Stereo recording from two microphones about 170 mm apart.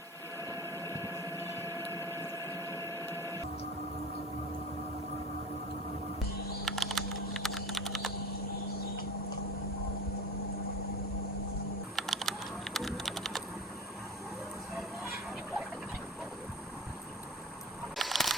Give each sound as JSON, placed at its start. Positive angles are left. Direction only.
{"t": 0.5, "sound": "vehicle", "side_deg": -20}
{"t": 1.4, "sound": "a sound", "side_deg": 15}
{"t": 2.5, "sound": "a sound", "side_deg": -20}
{"t": 6.7, "sound": "typing", "side_deg": 0}
{"t": 11.9, "sound": "computer keyboard", "side_deg": 0}
{"t": 12.7, "sound": "typing", "side_deg": 0}
{"t": 17.9, "sound": "single-lens reflex camera", "side_deg": 0}